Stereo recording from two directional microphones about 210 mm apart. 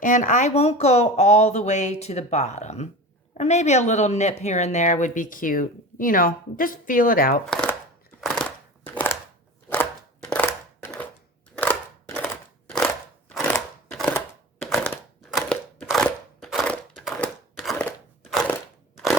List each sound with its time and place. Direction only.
0.0 s speech: 35° left (ahead or behind)
7.5 s chopping: 5° left (ahead or behind)
9.6 s chopping: 5° left (ahead or behind)
11.5 s scissors: 10° left (ahead or behind)
12.7 s crunch: 5° left (ahead or behind)
14.6 s crushing: centre (ahead or behind)
16.4 s a sound: centre (ahead or behind)